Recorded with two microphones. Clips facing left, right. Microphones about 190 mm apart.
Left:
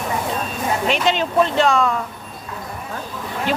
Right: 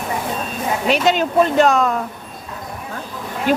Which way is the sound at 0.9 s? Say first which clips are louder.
Right 4 dB; 45° right (ahead or behind).